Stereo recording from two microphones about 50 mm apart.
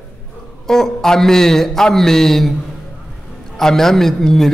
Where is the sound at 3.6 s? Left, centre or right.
Centre.